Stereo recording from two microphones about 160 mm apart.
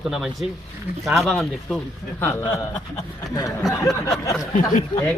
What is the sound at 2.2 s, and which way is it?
Speech, 15° left (ahead or behind).